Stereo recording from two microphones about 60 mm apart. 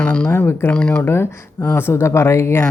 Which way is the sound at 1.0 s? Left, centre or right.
Left.